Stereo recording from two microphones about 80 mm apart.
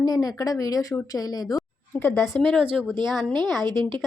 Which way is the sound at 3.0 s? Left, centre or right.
Centre.